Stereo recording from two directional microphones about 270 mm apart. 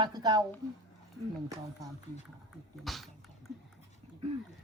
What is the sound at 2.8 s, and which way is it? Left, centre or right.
Speech, centre.